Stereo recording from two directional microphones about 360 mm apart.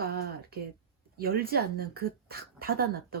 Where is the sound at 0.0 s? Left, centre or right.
Right.